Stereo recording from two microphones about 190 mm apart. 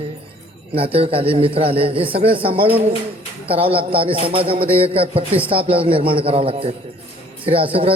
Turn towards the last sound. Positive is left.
turn(degrees=-30)  # may be behind; listen again after turning